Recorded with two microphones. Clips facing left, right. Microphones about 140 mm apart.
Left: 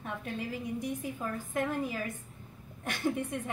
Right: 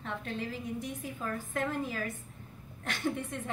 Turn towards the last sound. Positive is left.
turn(degrees=15)  # may be behind; listen again after turning